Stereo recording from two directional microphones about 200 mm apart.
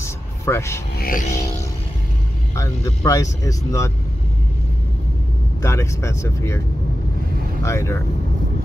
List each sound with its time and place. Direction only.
0.0 s vehicle: 15° left (ahead or behind)
0.9 s music: 45° left (ahead or behind)
2.5 s speech: 15° left (ahead or behind)
5.6 s speech: 15° left (ahead or behind)
7.6 s speech: 15° left (ahead or behind)